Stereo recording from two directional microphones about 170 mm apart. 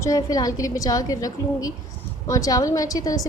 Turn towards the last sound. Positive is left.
turn(degrees=20)  # may be behind; listen again after turning